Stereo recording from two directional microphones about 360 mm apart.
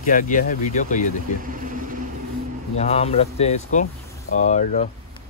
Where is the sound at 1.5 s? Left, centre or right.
Right.